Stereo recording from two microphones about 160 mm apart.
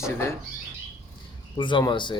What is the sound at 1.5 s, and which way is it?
Speech, 30° left (ahead or behind).